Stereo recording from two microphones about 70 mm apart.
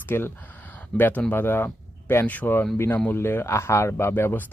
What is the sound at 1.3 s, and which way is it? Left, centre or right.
Speech, left.